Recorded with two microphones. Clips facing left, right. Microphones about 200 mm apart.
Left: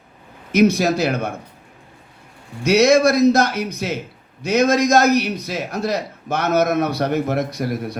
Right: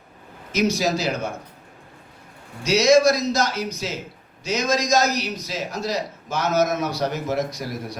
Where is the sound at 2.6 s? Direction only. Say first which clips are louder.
Left 2 dB; 60° left (ahead or behind).